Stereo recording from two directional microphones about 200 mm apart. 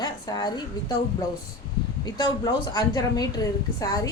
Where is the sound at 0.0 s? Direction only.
20° left (ahead or behind).